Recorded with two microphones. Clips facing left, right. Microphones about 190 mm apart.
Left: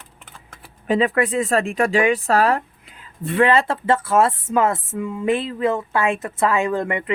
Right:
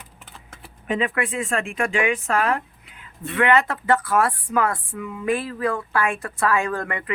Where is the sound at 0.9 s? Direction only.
35° left (ahead or behind).